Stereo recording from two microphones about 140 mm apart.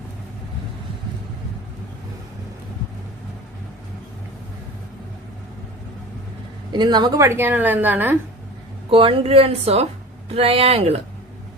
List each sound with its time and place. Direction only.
6.7 s speech: 30° right (ahead or behind)
7.2 s a woman's voice: 15° right (ahead or behind)
8.9 s speech: 40° right (ahead or behind)